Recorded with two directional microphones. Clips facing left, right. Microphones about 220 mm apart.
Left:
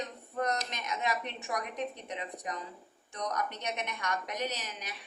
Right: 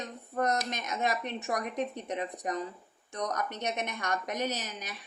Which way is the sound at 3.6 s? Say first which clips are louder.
Right 3 dB; 45° right (ahead or behind).